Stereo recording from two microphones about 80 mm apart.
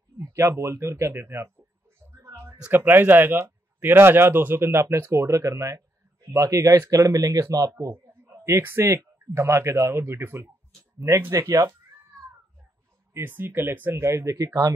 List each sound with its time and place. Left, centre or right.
0.2 s speech: right
2.2 s a sound: right
2.7 s speech: right
8.5 s speech: right
13.1 s speech: right